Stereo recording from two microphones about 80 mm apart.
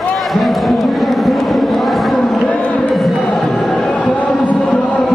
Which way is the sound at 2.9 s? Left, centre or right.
Centre.